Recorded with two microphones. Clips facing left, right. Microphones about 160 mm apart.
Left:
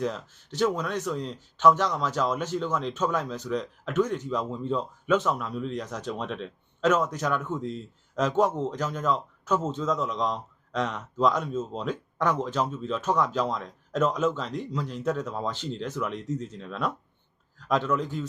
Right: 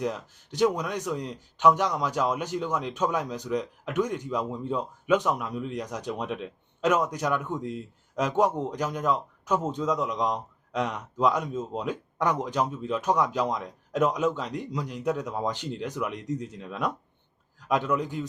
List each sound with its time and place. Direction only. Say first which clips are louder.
0.0 s a man's voice: even; 15° right (ahead or behind)